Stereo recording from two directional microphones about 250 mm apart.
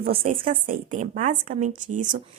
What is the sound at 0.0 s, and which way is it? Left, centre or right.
Speech, right.